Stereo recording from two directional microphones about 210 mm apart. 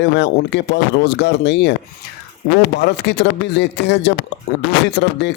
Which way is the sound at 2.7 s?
55° left (ahead or behind).